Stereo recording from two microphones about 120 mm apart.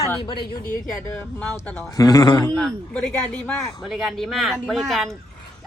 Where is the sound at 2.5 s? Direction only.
5° left (ahead or behind).